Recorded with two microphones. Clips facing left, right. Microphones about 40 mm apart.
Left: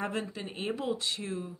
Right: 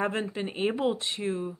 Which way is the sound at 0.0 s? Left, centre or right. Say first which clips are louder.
Right 5 dB; right.